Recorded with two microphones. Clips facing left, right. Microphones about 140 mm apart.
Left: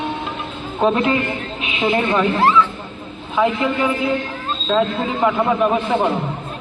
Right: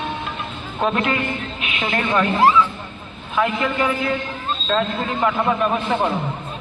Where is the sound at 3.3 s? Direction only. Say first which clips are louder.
Left 2 dB; 20° left (ahead or behind).